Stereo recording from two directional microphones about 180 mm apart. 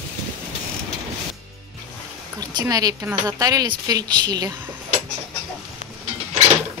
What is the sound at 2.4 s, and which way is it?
A woman's voice, 20° right (ahead or behind).